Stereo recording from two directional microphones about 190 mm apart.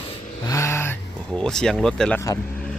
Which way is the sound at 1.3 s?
5° left (ahead or behind).